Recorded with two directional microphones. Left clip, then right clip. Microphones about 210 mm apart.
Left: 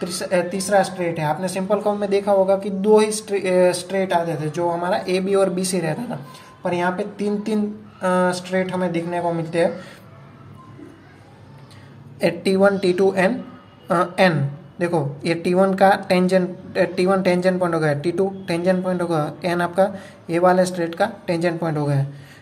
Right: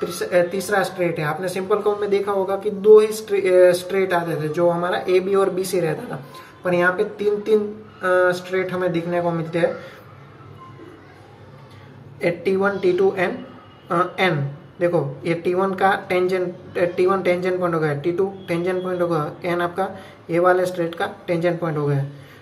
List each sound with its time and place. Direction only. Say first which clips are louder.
0.1 s speech: right 2 dB; 45° left (ahead or behind)
12.2 s speech: left 3 dB; 50° left (ahead or behind)